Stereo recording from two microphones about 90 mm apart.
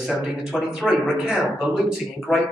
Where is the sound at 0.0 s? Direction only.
5° right (ahead or behind).